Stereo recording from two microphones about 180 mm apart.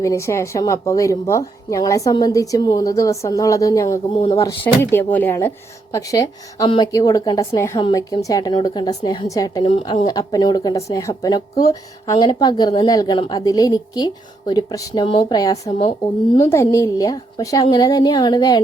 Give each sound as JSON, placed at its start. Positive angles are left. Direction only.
{"t": 0.0, "sound": "a woman's voice", "side_deg": 15}
{"t": 4.1, "sound": "a woman's voice", "side_deg": 30}
{"t": 4.4, "sound": "a woman's voice", "side_deg": 15}
{"t": 15.9, "sound": "a woman's voice", "side_deg": 35}
{"t": 16.5, "sound": "a woman's voice", "side_deg": 15}